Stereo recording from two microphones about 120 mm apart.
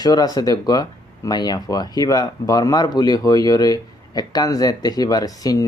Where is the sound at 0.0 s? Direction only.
30° left (ahead or behind).